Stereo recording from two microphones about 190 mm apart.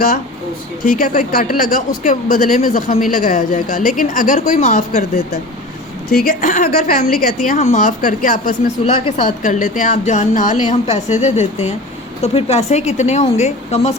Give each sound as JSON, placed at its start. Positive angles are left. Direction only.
{"t": 0.9, "sound": "a woman's voice", "side_deg": 45}
{"t": 8.8, "sound": "a woman's voice", "side_deg": 30}
{"t": 9.2, "sound": "a woman's voice", "side_deg": 45}